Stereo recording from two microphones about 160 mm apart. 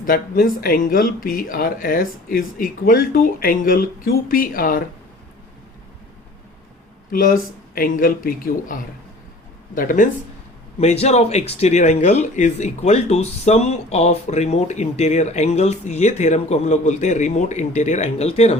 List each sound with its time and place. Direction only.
0.0 s speech: 65° left (ahead or behind)
7.1 s speech: 60° left (ahead or behind)
10.8 s speech: 40° left (ahead or behind)